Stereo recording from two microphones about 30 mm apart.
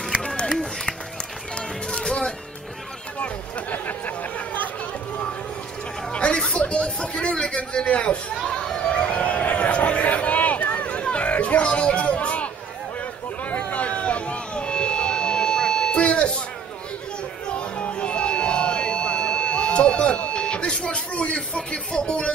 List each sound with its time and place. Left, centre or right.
1.9 s music: left
3.7 s chatter: left
6.1 s chatter: left
7.8 s a sound: left
8.5 s children playing: left
8.9 s a sound: left
13.5 s a sound: left
15.9 s buzzer: left
17.5 s buzzer: left